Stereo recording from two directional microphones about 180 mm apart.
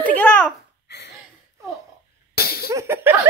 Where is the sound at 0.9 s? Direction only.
70° left (ahead or behind).